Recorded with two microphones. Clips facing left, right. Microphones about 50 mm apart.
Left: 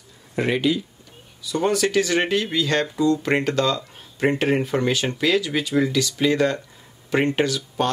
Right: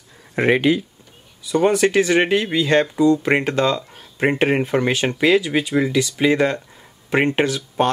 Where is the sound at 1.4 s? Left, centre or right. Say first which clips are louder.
Right 5 dB; right.